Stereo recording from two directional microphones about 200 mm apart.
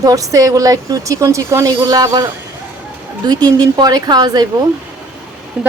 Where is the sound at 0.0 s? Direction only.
15° right (ahead or behind).